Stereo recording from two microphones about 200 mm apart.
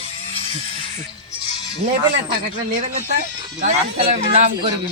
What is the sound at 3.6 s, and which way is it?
Speech, 35° right (ahead or behind).